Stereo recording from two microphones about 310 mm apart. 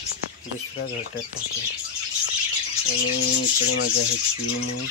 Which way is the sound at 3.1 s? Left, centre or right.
Left.